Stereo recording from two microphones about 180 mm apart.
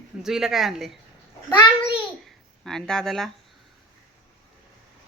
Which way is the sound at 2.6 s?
5° left (ahead or behind).